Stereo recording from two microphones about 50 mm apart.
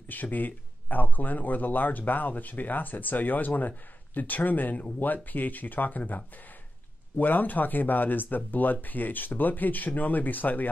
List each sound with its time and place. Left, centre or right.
0.1 s speech: left